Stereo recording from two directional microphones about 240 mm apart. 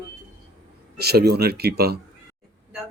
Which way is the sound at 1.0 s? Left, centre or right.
Right.